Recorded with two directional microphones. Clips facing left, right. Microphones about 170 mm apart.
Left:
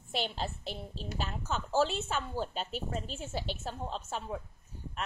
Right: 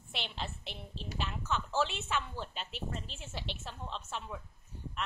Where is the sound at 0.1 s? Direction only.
40° left (ahead or behind).